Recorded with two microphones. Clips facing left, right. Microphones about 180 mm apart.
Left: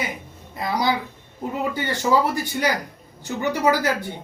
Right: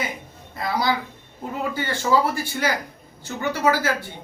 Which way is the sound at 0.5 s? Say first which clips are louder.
Left 1 dB; 15° left (ahead or behind).